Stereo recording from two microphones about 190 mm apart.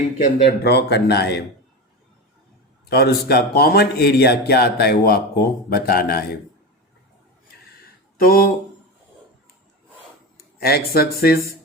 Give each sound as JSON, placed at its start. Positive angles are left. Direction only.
{"t": 0.4, "sound": "a man's voice", "side_deg": 60}
{"t": 2.9, "sound": "a man's voice", "side_deg": 55}
{"t": 8.2, "sound": "speech", "side_deg": 50}
{"t": 10.3, "sound": "speech", "side_deg": 55}